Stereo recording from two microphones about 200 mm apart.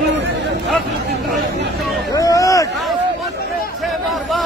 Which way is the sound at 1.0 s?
55° right (ahead or behind).